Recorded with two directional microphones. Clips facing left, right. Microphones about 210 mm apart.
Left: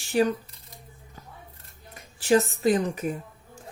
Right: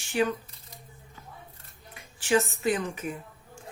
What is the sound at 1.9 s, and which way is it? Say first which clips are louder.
A woman's voice: left 4 dB; 35° left (ahead or behind).